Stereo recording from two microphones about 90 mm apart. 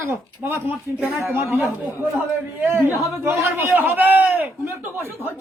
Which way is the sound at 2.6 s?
25° right (ahead or behind).